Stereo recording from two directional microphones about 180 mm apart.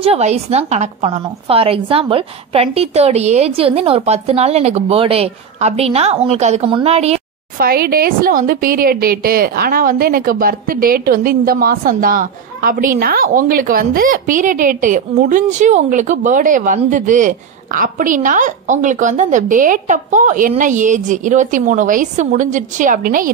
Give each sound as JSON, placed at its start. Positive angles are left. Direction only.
{"t": 0.0, "sound": "a woman's voice", "side_deg": -35}
{"t": 7.5, "sound": "a woman's voice", "side_deg": -55}